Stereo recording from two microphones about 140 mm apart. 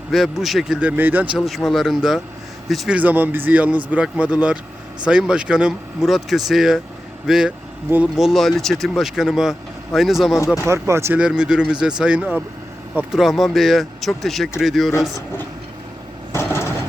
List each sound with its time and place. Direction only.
0.1 s speech: centre (ahead or behind)
1.4 s speech: centre (ahead or behind)
8.1 s speech: centre (ahead or behind)
10.3 s speech: 20° left (ahead or behind)
10.7 s speech: 20° right (ahead or behind)
11.2 s speech: 5° right (ahead or behind)
15.1 s speech: 15° left (ahead or behind)
16.3 s a sound: 20° left (ahead or behind)